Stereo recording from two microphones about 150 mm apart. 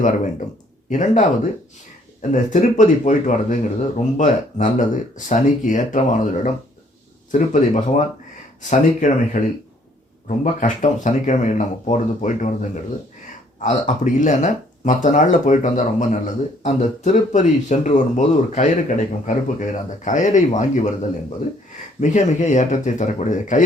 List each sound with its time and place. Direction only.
0.9 s speech: 55° left (ahead or behind)
2.3 s speech: 55° left (ahead or behind)
22.0 s speech: 55° left (ahead or behind)